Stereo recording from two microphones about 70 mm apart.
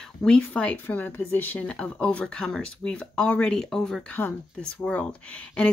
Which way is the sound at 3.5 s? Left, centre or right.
Centre.